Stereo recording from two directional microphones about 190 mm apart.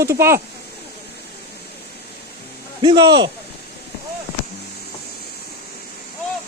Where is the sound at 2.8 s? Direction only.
25° right (ahead or behind).